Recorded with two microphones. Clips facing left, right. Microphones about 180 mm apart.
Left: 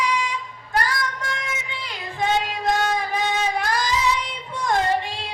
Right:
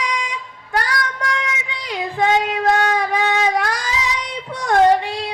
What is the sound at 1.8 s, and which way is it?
Child singing, 80° right.